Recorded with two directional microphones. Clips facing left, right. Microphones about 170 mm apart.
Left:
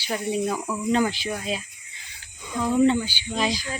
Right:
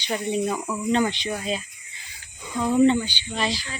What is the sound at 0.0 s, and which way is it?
Speech, 5° left (ahead or behind).